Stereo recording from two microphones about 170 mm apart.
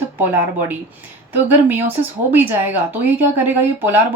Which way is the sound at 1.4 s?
10° right (ahead or behind).